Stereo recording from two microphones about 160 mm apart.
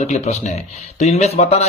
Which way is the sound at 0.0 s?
45° left (ahead or behind).